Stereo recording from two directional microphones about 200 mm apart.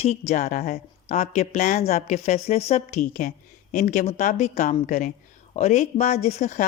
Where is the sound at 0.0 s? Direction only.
35° left (ahead or behind).